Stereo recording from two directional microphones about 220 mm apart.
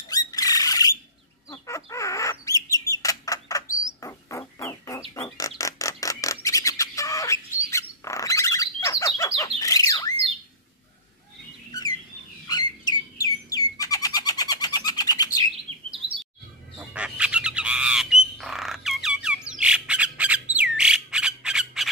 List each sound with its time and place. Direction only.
0.1 s rodents: 15° left (ahead or behind)
1.5 s bird: 15° left (ahead or behind)
12.4 s bird: 20° left (ahead or behind)
15.4 s chirp: 25° right (ahead or behind)
16.7 s squawk: 5° right (ahead or behind)
20.5 s bird: 5° right (ahead or behind)